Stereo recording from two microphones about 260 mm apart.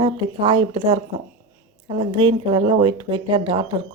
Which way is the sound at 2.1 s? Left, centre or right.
Centre.